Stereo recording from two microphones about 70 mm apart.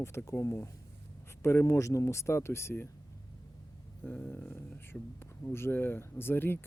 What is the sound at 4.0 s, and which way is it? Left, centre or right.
Speech, left.